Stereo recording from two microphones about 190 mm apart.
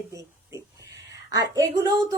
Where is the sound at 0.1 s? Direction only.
15° right (ahead or behind).